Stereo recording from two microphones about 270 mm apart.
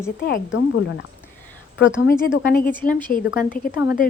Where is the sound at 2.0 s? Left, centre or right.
Left.